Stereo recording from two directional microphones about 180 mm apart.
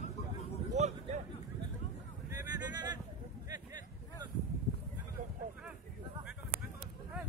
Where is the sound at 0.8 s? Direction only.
40° right (ahead or behind).